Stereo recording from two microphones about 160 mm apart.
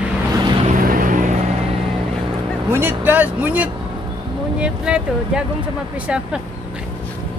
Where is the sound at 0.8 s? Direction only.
60° right (ahead or behind).